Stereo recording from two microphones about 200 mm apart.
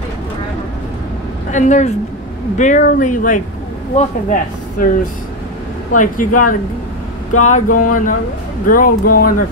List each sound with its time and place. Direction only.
1.5 s speech: 40° left (ahead or behind)
5.9 s speech: 40° left (ahead or behind)